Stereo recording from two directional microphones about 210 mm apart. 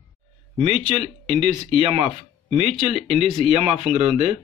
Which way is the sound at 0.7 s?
30° left (ahead or behind).